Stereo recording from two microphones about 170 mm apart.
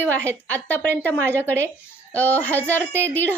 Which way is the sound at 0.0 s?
10° left (ahead or behind).